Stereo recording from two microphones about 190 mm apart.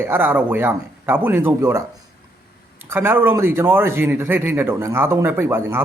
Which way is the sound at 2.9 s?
10° right (ahead or behind).